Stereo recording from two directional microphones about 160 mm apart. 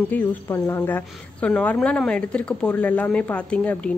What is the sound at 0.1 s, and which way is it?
Speech, 10° left (ahead or behind).